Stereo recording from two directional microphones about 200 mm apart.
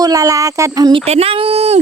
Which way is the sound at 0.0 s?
15° right (ahead or behind).